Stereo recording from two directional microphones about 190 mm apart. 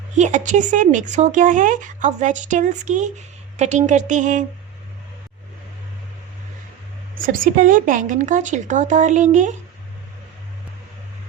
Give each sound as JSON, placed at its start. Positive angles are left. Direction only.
{"t": 0.2, "sound": "speech", "side_deg": -40}
{"t": 7.3, "sound": "speech", "side_deg": -45}